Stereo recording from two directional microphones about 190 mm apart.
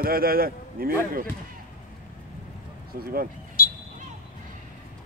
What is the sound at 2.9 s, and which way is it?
Speech, 50° right (ahead or behind).